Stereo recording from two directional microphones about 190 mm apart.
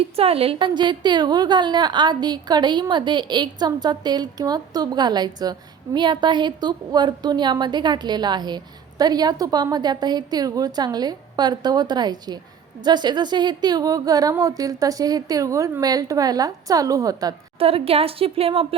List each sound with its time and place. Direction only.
0.0 s a woman's voice: 30° right (ahead or behind)
17.6 s a woman's voice: 30° right (ahead or behind)